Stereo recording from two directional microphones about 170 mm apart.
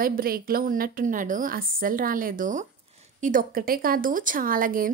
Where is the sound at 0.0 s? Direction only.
60° right (ahead or behind).